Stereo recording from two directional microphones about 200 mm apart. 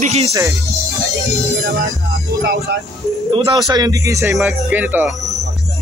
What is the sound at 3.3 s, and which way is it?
Speech, 20° right (ahead or behind).